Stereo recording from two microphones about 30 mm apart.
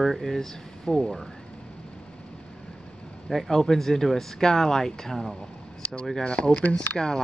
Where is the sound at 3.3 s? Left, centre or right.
Centre.